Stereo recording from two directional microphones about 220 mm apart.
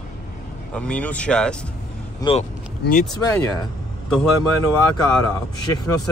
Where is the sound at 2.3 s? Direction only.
20° left (ahead or behind).